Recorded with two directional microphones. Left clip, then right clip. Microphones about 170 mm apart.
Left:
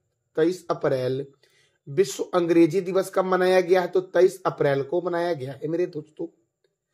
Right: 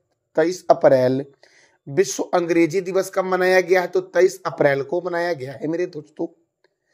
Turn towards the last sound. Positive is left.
turn(degrees=-35)  # may be behind; listen again after turning